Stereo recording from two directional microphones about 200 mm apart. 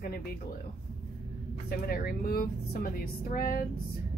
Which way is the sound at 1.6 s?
50° left (ahead or behind).